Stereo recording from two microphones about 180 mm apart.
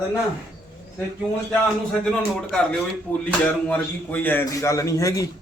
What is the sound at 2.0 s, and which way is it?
A man's voice, 5° left (ahead or behind).